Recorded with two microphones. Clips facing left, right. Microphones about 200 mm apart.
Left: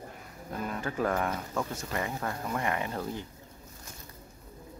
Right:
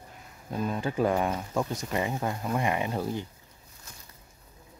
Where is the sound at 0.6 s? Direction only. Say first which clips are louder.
Right 4 dB; 25° right (ahead or behind).